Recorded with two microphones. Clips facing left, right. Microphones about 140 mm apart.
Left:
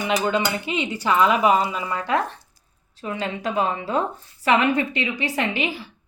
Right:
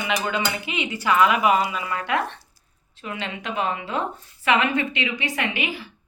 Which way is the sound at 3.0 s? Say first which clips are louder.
Left 4 dB; 40° left (ahead or behind).